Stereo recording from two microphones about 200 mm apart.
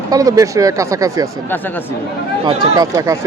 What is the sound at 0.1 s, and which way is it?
Speech, 15° right (ahead or behind).